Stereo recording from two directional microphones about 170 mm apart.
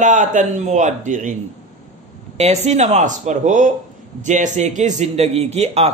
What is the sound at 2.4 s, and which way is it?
A man's voice, 40° right (ahead or behind).